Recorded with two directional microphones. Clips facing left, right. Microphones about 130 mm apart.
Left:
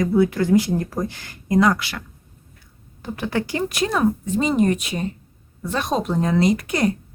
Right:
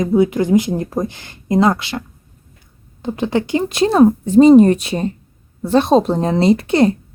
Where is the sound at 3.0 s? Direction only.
20° right (ahead or behind).